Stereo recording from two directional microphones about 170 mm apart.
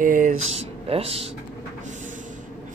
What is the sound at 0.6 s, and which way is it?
Speech, 35° right (ahead or behind).